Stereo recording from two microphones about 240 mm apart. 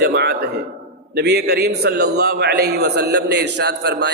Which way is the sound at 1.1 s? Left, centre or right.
Right.